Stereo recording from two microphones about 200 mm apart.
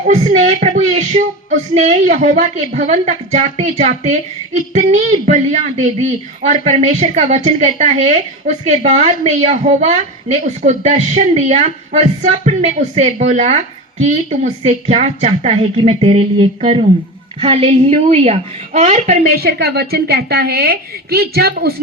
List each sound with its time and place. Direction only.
0.1 s speech: 30° right (ahead or behind)
19.4 s a woman's voice: 50° right (ahead or behind)